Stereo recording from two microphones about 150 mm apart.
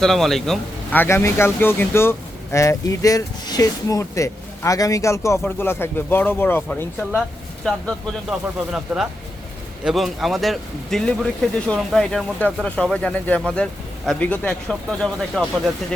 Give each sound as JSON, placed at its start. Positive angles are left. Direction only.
{"t": 0.0, "sound": "speech", "side_deg": 0}
{"t": 0.9, "sound": "speech", "side_deg": 15}